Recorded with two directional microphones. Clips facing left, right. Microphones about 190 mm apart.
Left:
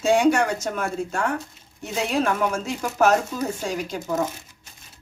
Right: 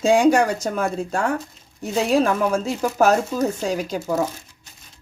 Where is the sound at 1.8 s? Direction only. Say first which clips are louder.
Right 5 dB; 35° right (ahead or behind).